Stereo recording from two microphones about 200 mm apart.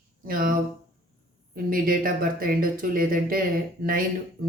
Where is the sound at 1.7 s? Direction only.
45° right (ahead or behind).